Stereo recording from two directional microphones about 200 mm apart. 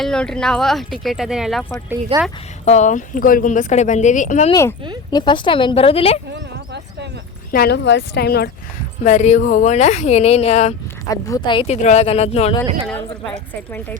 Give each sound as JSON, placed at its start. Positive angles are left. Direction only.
{"t": 0.0, "sound": "speech", "side_deg": 5}
{"t": 2.1, "sound": "speech", "side_deg": -25}
{"t": 2.6, "sound": "speech", "side_deg": 35}
{"t": 5.1, "sound": "a woman's voice", "side_deg": 25}
{"t": 7.5, "sound": "speech", "side_deg": 55}
{"t": 9.0, "sound": "speech", "side_deg": 35}
{"t": 11.1, "sound": "a woman's voice", "side_deg": 20}
{"t": 11.8, "sound": "speech", "side_deg": 35}